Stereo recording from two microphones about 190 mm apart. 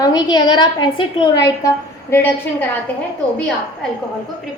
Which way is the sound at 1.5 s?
15° left (ahead or behind).